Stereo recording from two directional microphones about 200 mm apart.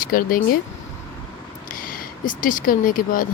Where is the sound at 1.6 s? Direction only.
45° left (ahead or behind).